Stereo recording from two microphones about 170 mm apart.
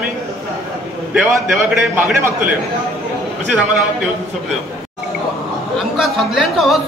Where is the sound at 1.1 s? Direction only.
10° right (ahead or behind).